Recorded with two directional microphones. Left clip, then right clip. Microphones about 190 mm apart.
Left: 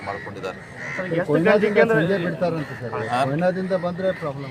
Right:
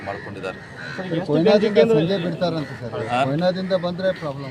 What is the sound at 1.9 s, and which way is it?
Speech, 55° right (ahead or behind).